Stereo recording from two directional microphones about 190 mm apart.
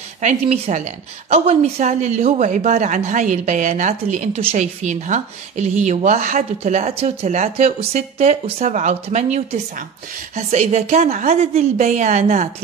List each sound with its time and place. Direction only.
0.2 s a woman's voice: 40° right (ahead or behind)